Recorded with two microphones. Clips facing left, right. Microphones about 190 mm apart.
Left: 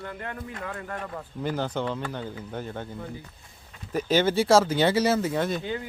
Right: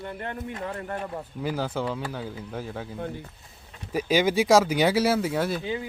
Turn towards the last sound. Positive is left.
turn(degrees=-5)  # may be behind; listen again after turning